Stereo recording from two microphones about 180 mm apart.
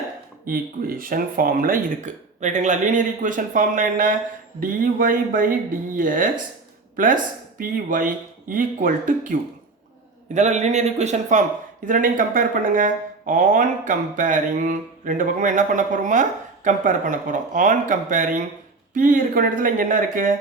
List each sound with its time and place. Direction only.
0.4 s a man's voice: 55° right (ahead or behind)